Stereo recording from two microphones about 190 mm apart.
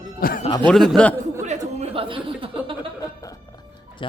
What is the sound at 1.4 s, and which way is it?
Speech, 35° right (ahead or behind).